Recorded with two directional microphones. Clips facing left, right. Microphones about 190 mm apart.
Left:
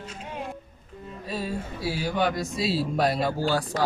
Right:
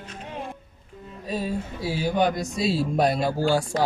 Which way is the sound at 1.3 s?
15° right (ahead or behind).